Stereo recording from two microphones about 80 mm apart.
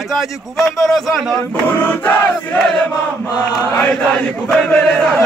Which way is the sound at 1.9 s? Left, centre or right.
Left.